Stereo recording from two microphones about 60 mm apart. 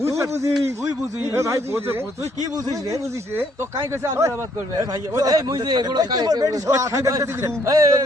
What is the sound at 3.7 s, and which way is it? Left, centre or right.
Speech, right.